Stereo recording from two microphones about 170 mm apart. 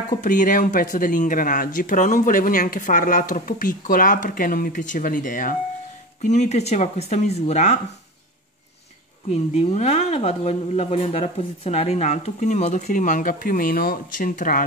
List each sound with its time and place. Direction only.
0.2 s speech: 50° left (ahead or behind)
9.3 s speech: 40° left (ahead or behind)